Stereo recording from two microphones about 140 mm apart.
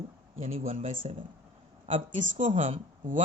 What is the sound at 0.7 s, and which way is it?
Speech, 45° right (ahead or behind).